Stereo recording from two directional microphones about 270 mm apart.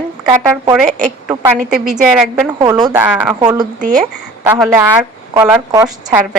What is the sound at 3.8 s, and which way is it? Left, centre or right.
Speech, right.